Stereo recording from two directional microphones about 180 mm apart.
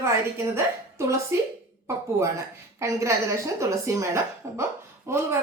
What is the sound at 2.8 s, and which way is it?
A woman's voice, 15° right (ahead or behind).